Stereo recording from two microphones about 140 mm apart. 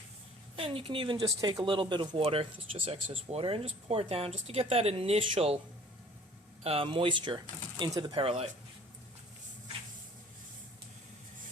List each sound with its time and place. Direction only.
0.5 s speech: 40° right (ahead or behind)
6.7 s speech: 40° right (ahead or behind)